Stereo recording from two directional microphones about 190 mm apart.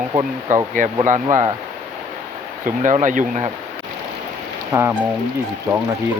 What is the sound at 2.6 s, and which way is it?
Speech, 40° right (ahead or behind).